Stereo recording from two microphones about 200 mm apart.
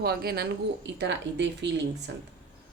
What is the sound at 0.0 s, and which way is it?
Speech, 50° right (ahead or behind).